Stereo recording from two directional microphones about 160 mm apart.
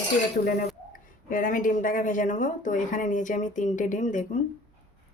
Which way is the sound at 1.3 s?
55° left (ahead or behind).